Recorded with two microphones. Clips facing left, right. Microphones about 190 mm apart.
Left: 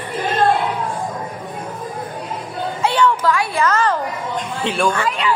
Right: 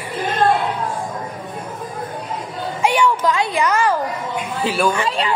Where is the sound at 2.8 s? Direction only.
15° right (ahead or behind).